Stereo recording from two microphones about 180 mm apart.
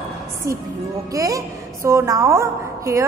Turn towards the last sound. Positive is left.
turn(degrees=-15)  # may be behind; listen again after turning